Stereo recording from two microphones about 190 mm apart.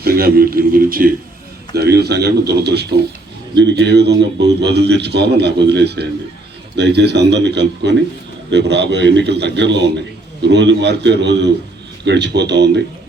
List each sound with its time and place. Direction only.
0.0 s a man's voice: 55° right (ahead or behind)
1.7 s a man's voice: 60° right (ahead or behind)